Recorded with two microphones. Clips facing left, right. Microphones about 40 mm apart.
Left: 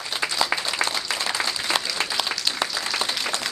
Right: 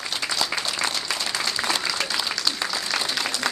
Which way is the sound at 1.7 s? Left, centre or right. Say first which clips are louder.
Even; left.